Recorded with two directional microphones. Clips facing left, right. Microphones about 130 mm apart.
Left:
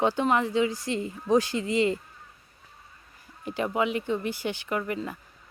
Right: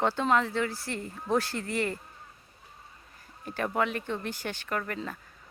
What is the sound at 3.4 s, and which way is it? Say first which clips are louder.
Speech: left 2 dB; 15° left (ahead or behind).